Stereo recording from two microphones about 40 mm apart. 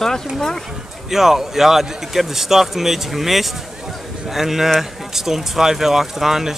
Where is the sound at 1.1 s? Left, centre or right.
Centre.